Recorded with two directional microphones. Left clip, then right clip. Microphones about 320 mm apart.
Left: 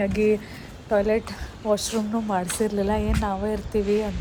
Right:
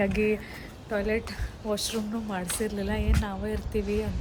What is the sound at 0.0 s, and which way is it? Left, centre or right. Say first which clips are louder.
Speech: left 4 dB; centre.